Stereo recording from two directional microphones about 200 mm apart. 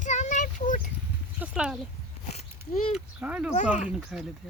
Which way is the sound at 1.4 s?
5° right (ahead or behind).